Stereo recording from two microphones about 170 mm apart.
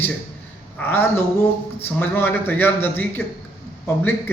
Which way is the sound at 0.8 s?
15° left (ahead or behind).